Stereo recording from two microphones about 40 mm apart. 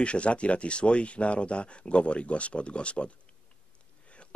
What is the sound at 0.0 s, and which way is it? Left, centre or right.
Speech, left.